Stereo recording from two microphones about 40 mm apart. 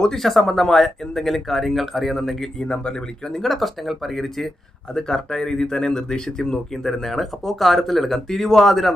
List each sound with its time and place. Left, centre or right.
0.0 s speech: centre
2.6 s speech: left
3.4 s speech: centre
4.9 s speech: centre